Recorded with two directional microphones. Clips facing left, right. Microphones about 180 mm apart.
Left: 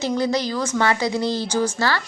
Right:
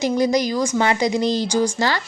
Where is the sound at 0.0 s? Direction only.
15° right (ahead or behind).